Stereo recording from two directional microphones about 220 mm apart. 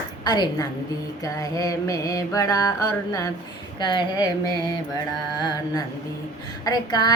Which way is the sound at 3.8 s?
20° left (ahead or behind).